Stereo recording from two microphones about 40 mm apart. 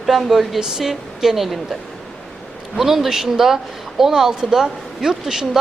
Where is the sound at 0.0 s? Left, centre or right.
Centre.